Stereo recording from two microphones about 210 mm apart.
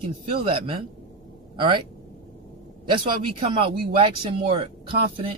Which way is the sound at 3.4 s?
25° right (ahead or behind).